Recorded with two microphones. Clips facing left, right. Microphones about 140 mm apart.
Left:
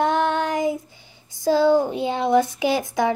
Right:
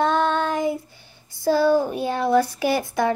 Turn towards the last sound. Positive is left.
turn(degrees=15)  # may be behind; listen again after turning